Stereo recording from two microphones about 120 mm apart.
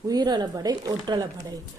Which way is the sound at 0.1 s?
35° right (ahead or behind).